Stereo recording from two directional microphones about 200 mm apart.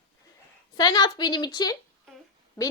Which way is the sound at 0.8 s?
20° left (ahead or behind).